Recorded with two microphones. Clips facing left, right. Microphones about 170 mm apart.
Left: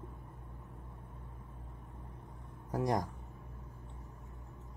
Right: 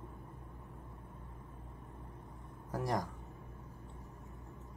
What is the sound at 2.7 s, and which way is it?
Speech, 20° left (ahead or behind).